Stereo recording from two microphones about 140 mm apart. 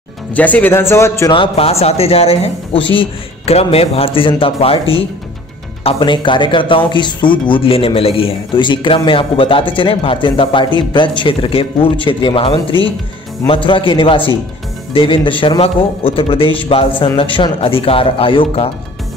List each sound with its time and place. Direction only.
0.3 s speech: 10° left (ahead or behind)
1.3 s a man's voice: 40° left (ahead or behind)
13.7 s a man's voice: 35° left (ahead or behind)